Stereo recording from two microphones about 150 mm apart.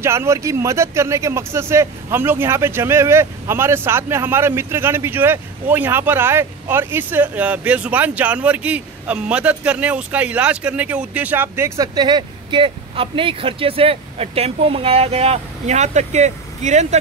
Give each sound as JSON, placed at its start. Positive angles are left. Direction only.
{"t": 0.0, "sound": "speech", "side_deg": -15}